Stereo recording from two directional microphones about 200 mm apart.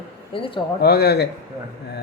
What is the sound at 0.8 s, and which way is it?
Speech, 55° left (ahead or behind).